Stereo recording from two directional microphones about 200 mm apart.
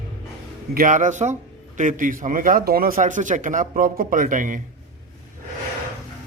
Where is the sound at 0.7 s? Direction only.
40° right (ahead or behind).